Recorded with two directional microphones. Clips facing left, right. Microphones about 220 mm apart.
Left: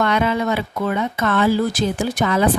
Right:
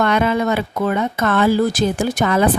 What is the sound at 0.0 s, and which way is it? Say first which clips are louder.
Speech: right 2 dB; 50° right (ahead or behind).